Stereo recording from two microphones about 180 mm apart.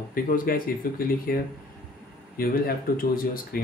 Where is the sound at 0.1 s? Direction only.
55° left (ahead or behind).